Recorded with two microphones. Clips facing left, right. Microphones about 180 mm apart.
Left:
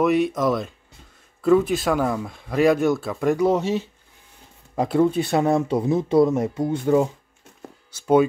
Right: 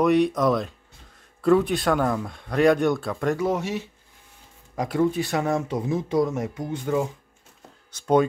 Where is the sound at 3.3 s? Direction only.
20° left (ahead or behind).